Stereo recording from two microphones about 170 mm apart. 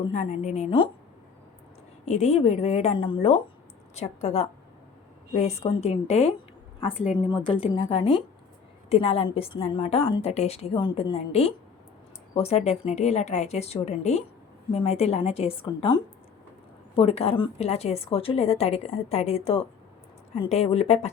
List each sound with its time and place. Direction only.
0.1 s a woman's voice: 40° left (ahead or behind)
2.0 s a woman's voice: 40° left (ahead or behind)
5.6 s a woman's voice: 35° left (ahead or behind)
7.3 s a woman's voice: 25° left (ahead or behind)